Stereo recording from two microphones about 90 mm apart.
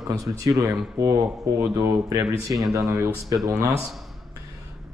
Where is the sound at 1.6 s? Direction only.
30° right (ahead or behind).